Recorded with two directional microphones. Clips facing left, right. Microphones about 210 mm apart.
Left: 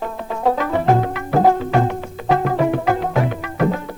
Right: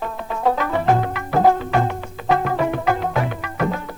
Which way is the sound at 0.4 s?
30° left (ahead or behind).